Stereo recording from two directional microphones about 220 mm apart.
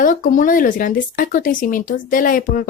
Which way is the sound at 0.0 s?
40° left (ahead or behind).